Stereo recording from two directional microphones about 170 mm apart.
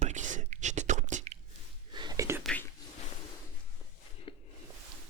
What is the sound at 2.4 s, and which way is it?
Whispering, 5° left (ahead or behind).